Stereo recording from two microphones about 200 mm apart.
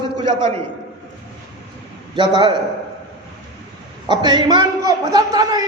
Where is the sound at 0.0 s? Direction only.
20° right (ahead or behind).